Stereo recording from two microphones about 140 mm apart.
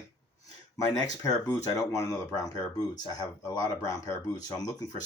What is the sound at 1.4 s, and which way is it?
Speech, 20° left (ahead or behind).